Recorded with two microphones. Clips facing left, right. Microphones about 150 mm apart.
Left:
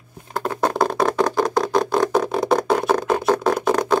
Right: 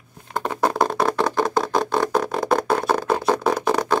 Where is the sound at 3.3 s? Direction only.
5° right (ahead or behind).